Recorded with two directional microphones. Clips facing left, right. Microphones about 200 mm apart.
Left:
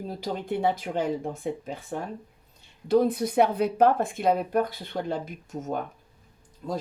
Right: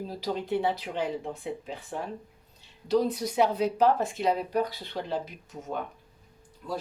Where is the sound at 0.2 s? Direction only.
50° left (ahead or behind).